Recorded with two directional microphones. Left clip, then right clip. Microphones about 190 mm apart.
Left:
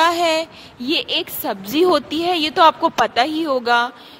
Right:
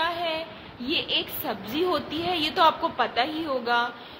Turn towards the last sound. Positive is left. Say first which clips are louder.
# left 8 dB
turn(degrees=65)  # may be behind; listen again after turning